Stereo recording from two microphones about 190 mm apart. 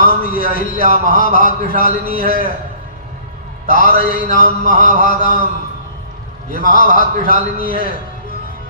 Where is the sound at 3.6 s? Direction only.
50° left (ahead or behind).